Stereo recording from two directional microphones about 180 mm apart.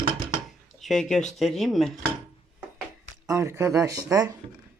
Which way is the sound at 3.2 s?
15° right (ahead or behind).